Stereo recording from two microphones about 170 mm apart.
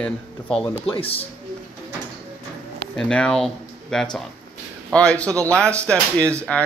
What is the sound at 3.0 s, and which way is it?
Speech, 5° left (ahead or behind).